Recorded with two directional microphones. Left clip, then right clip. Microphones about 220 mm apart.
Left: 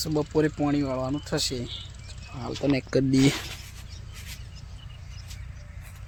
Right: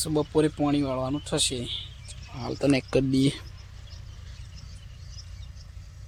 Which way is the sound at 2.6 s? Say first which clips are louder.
Right 2 dB; 45° right (ahead or behind).